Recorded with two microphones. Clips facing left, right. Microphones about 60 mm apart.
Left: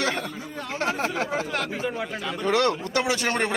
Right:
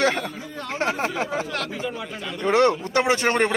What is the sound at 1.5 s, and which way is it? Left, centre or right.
Speech, left.